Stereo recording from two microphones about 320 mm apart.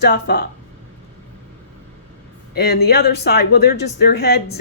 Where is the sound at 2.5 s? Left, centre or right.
Left.